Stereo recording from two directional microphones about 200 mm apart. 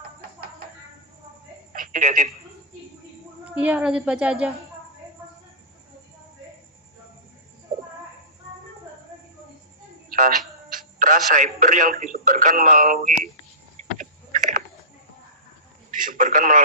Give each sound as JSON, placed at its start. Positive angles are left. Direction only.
{"t": 1.7, "sound": "telephone", "side_deg": -45}
{"t": 3.5, "sound": "a woman's voice", "side_deg": -5}
{"t": 10.1, "sound": "music", "side_deg": -45}
{"t": 11.3, "sound": "speech", "side_deg": -40}
{"t": 14.0, "sound": "a sound", "side_deg": -40}
{"t": 16.0, "sound": "radio", "side_deg": -40}